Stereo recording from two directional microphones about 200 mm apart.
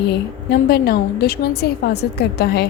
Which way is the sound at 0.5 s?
50° left (ahead or behind).